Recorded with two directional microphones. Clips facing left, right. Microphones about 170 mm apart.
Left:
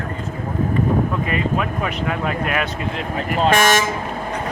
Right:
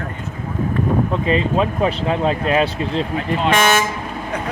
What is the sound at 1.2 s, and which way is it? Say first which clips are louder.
Speech: right 4 dB; 25° right (ahead or behind).